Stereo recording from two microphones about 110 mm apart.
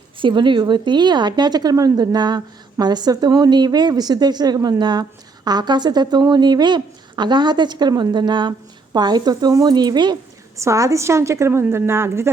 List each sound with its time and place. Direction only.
0.2 s a woman's voice: 45° right (ahead or behind)
10.6 s a woman's voice: 30° right (ahead or behind)